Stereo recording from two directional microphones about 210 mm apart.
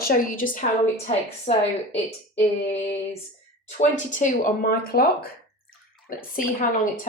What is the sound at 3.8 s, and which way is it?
Speech, 35° left (ahead or behind).